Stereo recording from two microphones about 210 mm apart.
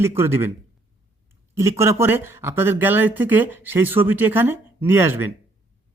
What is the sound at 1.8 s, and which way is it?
A woman's voice, 10° right (ahead or behind).